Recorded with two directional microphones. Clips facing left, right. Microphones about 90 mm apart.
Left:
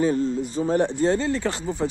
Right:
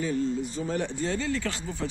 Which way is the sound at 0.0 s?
40° left (ahead or behind).